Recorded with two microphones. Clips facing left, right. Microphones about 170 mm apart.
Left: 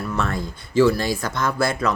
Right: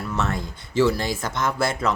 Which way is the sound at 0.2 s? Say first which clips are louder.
Left 1 dB; 20° right (ahead or behind).